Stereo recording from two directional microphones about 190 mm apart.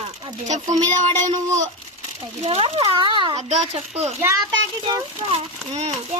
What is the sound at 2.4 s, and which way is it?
Speech, 30° right (ahead or behind).